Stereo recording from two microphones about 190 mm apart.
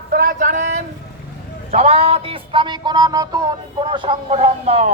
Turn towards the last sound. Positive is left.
turn(degrees=-35)  # may be behind; listen again after turning